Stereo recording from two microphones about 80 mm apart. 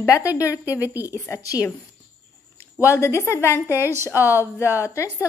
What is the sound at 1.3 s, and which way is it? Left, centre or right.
Speech, left.